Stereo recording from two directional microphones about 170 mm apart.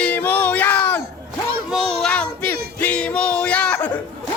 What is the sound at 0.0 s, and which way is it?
Child singing, 10° left (ahead or behind).